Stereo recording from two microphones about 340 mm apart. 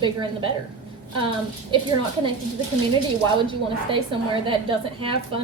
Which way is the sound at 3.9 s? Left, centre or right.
Centre.